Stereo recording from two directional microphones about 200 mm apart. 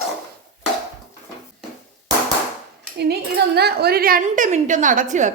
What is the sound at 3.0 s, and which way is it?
A woman's voice, 55° right (ahead or behind).